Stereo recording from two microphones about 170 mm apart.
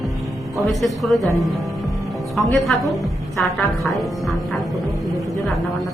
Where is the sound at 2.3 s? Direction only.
Centre (ahead or behind).